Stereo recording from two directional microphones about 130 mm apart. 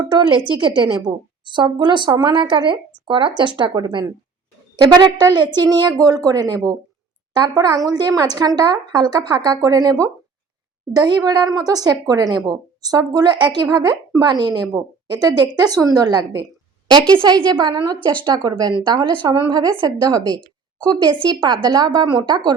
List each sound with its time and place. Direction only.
0.0 s a woman's voice: 35° right (ahead or behind)